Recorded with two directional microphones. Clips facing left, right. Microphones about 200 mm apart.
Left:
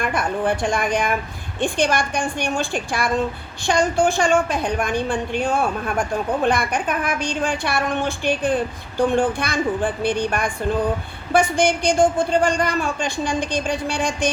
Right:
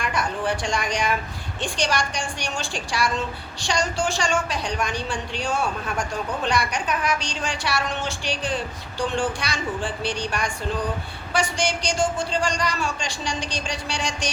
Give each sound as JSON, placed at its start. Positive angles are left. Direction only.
{"t": 0.0, "sound": "a woman's voice", "side_deg": 55}